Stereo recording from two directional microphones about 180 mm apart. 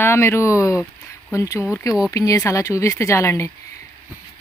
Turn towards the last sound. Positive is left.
turn(degrees=15)  # may be behind; listen again after turning